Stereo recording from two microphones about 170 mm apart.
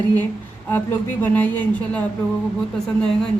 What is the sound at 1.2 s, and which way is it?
Speech, 10° left (ahead or behind).